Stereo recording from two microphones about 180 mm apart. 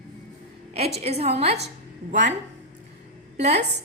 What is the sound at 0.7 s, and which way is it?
Speech, 35° right (ahead or behind).